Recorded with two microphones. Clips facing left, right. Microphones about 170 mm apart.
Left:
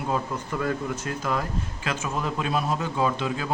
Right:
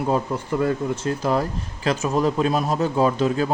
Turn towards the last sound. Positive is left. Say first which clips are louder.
# right 6 dB
turn(degrees=-40)  # may be behind; listen again after turning